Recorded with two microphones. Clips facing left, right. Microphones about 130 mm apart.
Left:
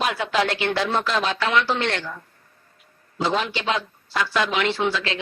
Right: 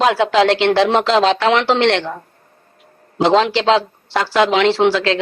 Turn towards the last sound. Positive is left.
turn(degrees=-90)